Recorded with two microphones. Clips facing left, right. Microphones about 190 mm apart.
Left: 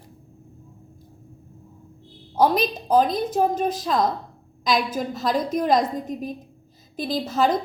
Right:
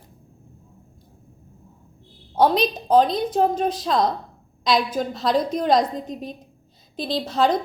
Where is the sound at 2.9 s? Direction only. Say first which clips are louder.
Right 2 dB; 5° left (ahead or behind).